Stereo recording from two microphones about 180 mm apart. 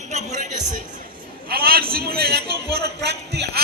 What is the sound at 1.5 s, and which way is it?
A man's voice, 55° right (ahead or behind).